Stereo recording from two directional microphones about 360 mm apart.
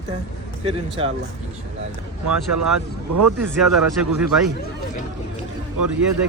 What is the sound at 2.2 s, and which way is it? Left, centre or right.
Speech, right.